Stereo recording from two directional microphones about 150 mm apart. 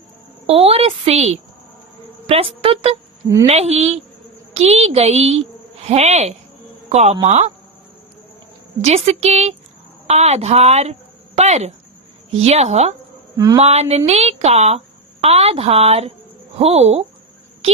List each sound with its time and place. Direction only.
0.4 s a woman's voice: 40° right (ahead or behind)
8.8 s speech: 45° right (ahead or behind)
13.3 s speech: 20° right (ahead or behind)
13.6 s speech: 45° right (ahead or behind)